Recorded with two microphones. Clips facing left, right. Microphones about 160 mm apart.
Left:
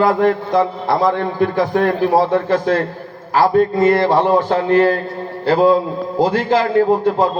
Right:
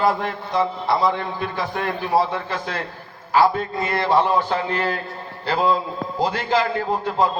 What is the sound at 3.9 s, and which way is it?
A man's voice, 40° left (ahead or behind).